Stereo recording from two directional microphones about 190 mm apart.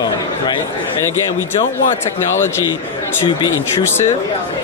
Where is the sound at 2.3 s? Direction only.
10° left (ahead or behind).